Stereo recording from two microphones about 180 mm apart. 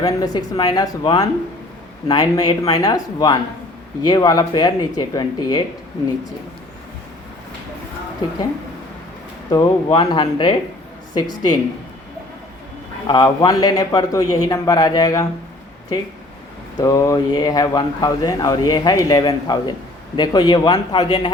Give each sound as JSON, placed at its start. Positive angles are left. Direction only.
{"t": 0.0, "sound": "speech", "side_deg": 25}
{"t": 9.5, "sound": "speech", "side_deg": 20}
{"t": 13.1, "sound": "speech", "side_deg": 25}
{"t": 16.7, "sound": "speech", "side_deg": 20}